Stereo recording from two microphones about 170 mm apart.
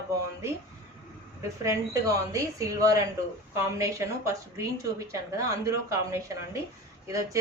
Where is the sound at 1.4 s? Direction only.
20° right (ahead or behind).